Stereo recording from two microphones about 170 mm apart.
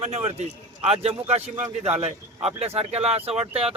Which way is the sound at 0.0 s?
40° right (ahead or behind).